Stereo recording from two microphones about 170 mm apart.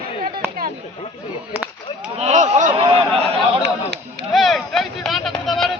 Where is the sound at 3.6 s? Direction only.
80° right.